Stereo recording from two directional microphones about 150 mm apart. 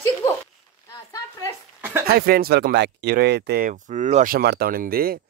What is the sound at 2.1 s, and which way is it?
Speech, 90° right.